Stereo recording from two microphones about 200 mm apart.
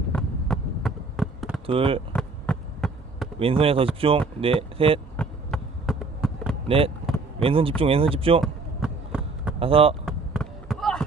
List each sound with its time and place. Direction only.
0.1 s basketball bounce: 5° left (ahead or behind)
1.6 s speech: 25° right (ahead or behind)
2.1 s a sound: 5° left (ahead or behind)
3.3 s speech: 25° right (ahead or behind)
5.1 s a sound: 5° left (ahead or behind)
6.7 s speech: 30° right (ahead or behind)
8.4 s basketball bounce: 5° right (ahead or behind)
9.6 s speech: 30° right (ahead or behind)
10.1 s basketball bounce: centre (ahead or behind)